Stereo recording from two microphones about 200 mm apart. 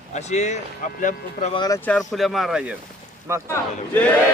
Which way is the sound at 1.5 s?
20° left (ahead or behind).